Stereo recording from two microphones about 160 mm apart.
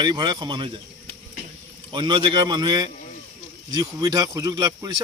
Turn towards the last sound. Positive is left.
turn(degrees=-25)  # may be behind; listen again after turning